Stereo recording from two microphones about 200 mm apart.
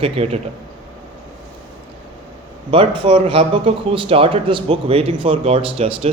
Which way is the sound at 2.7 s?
25° right (ahead or behind).